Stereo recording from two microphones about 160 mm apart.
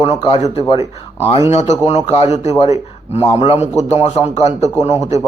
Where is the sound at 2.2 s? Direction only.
20° right (ahead or behind).